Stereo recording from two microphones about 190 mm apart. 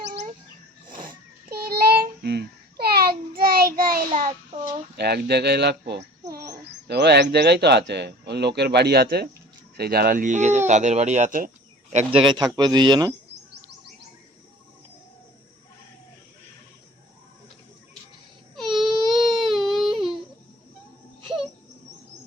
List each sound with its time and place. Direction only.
0.9 s child singing: 45° right (ahead or behind)
4.3 s child singing: 25° right (ahead or behind)
4.9 s speech: 60° right (ahead or behind); by 12.0 s 40° right (ahead or behind)
12.2 s speech: 25° right (ahead or behind)
18.5 s baby cry: centre (ahead or behind)